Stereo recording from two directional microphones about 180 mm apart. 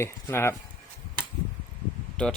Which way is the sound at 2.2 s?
5° left (ahead or behind).